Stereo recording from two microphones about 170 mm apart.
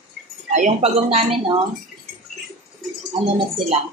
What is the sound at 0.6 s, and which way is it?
Speech, 40° right (ahead or behind).